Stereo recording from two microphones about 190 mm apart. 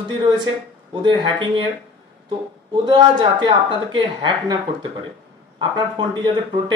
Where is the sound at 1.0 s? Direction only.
25° right (ahead or behind).